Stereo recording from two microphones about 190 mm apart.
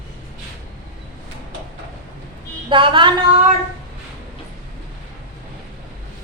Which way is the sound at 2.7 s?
25° right (ahead or behind).